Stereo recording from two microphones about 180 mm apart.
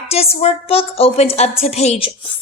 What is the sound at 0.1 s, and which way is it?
A woman's voice, 35° left (ahead or behind).